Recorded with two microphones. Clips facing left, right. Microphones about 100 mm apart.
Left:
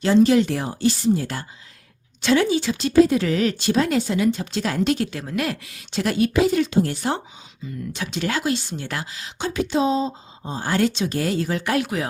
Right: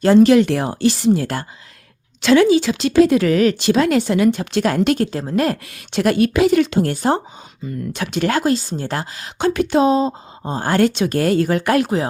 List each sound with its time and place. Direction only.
0.2 s speech: 70° right (ahead or behind)
2.2 s speech: 90° right; by 5.0 s 60° right (ahead or behind)
5.1 s a woman's voice: 35° right (ahead or behind)
5.6 s speech: 55° right (ahead or behind)
7.9 s speech: 55° right (ahead or behind)